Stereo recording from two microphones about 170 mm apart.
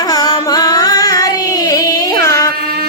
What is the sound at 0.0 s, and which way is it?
Carnatic music, 20° left (ahead or behind).